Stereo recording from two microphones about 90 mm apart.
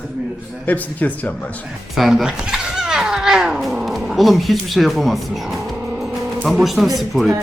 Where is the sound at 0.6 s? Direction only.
20° left (ahead or behind).